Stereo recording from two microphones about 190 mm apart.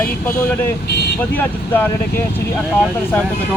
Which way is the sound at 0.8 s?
60° left (ahead or behind).